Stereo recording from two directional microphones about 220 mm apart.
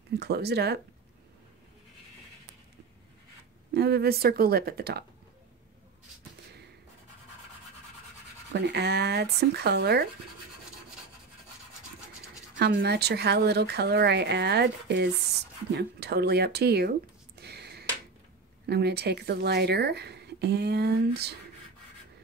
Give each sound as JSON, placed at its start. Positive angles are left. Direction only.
{"t": 0.2, "sound": "a woman's voice", "side_deg": -50}
{"t": 3.7, "sound": "a woman's voice", "side_deg": -50}
{"t": 8.5, "sound": "a woman's voice", "side_deg": -50}
{"t": 12.5, "sound": "a woman's voice", "side_deg": -50}
{"t": 17.4, "sound": "a sound", "side_deg": -50}
{"t": 18.7, "sound": "a woman's voice", "side_deg": -50}